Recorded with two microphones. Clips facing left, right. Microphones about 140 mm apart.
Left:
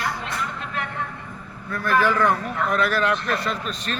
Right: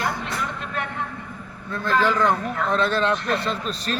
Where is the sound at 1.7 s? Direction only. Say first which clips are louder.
Left 1 dB; 20° right (ahead or behind).